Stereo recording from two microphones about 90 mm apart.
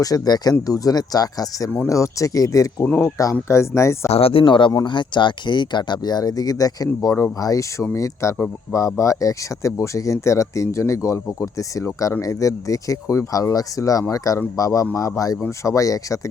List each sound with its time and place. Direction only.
0.0 s speech: 45° left (ahead or behind)
4.2 s speech: 85° left; by 16.3 s 35° left (ahead or behind)